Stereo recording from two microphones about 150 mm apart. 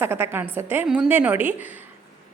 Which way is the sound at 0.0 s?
15° right (ahead or behind).